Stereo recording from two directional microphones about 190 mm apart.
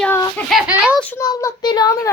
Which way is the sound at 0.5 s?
10° right (ahead or behind).